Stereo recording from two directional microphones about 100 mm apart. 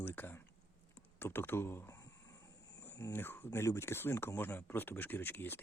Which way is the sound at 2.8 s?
25° left (ahead or behind).